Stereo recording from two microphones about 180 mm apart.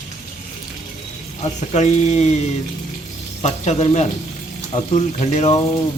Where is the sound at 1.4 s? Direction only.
40° left (ahead or behind).